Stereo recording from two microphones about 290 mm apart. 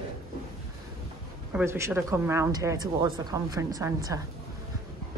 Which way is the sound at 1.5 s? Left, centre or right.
Centre.